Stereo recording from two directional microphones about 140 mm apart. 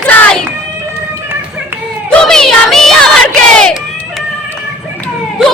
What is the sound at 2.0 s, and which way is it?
Music, 5° left (ahead or behind).